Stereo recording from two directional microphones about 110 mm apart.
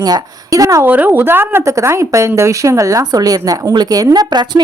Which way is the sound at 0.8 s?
15° right (ahead or behind).